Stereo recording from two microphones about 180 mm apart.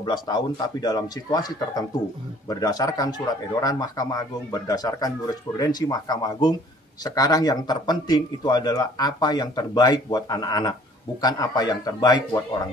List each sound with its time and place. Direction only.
0.0 s a man's voice: 25° left (ahead or behind)